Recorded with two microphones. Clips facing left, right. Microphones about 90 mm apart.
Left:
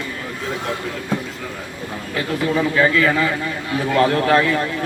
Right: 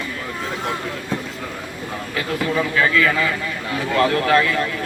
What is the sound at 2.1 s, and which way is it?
Speech, 25° left (ahead or behind).